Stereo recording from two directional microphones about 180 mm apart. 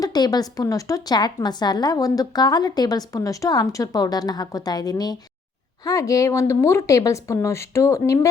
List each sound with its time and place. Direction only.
0.0 s a woman's voice: 20° left (ahead or behind)